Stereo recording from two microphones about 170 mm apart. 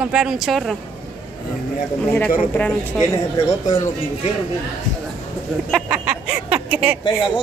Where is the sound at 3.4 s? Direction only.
20° left (ahead or behind).